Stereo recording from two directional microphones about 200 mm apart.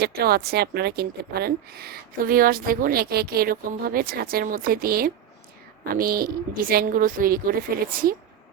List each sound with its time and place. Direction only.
0.0 s a woman's voice: 50° right (ahead or behind)